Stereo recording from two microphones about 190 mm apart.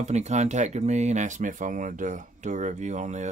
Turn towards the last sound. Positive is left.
turn(degrees=-40)  # may be behind; listen again after turning